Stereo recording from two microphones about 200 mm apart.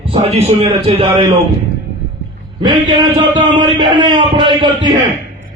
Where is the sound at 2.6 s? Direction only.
25° right (ahead or behind).